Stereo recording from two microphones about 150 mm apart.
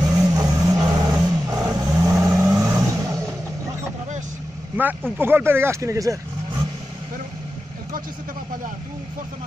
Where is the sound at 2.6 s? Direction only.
20° right (ahead or behind).